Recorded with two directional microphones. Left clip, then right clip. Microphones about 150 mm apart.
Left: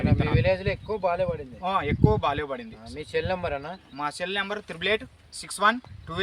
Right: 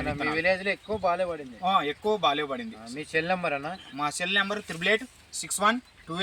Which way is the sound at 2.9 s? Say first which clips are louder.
Right 1 dB; 50° left (ahead or behind).